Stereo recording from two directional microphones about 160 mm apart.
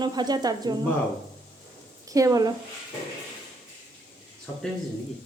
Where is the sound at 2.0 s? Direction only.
20° right (ahead or behind).